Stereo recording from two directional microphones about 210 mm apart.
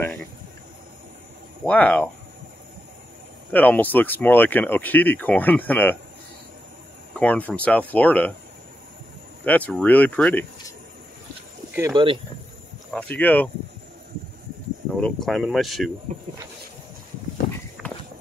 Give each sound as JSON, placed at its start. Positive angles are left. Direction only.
{"t": 1.6, "sound": "speech", "side_deg": 5}
{"t": 3.5, "sound": "speech", "side_deg": 10}
{"t": 7.2, "sound": "speech", "side_deg": 5}
{"t": 9.4, "sound": "speech", "side_deg": 5}
{"t": 11.7, "sound": "speech", "side_deg": -15}
{"t": 12.9, "sound": "speech", "side_deg": 5}
{"t": 15.0, "sound": "speech", "side_deg": 0}
{"t": 17.8, "sound": "horse", "side_deg": 0}